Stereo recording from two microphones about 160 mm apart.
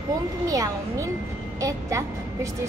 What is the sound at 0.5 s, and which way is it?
A woman's voice, 20° right (ahead or behind).